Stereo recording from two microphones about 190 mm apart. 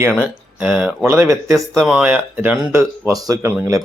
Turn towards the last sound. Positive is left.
turn(degrees=-20)  # may be behind; listen again after turning